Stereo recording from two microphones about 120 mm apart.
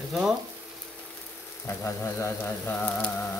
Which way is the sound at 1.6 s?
20° left (ahead or behind).